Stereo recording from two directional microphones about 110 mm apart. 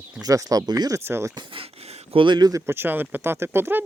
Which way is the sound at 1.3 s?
55° right (ahead or behind).